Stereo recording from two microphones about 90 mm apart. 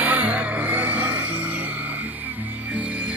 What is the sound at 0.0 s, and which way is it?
Music, 15° right (ahead or behind).